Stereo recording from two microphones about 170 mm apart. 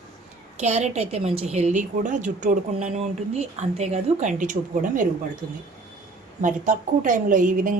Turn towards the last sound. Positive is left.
turn(degrees=-50)  # may be behind; listen again after turning